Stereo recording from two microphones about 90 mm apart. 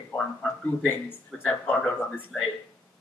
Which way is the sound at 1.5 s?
15° left (ahead or behind).